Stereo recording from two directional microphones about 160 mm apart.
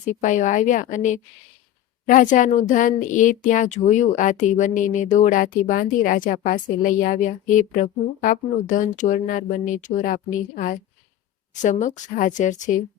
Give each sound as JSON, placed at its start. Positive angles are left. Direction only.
{"t": 0.1, "sound": "a woman's voice", "side_deg": 50}